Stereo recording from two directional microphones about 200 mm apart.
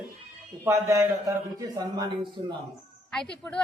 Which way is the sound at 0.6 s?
15° right (ahead or behind).